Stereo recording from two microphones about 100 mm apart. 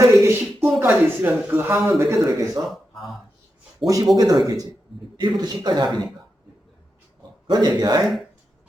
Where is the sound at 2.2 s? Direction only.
40° right (ahead or behind).